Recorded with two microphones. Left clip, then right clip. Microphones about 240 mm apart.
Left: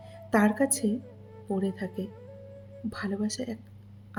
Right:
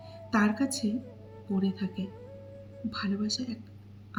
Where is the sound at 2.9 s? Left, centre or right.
Left.